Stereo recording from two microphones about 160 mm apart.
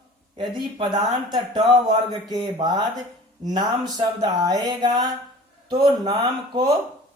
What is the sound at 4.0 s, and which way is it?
A man's voice, 25° right (ahead or behind).